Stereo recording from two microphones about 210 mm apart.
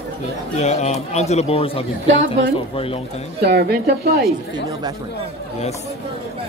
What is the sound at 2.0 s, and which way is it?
Speech, 65° right (ahead or behind).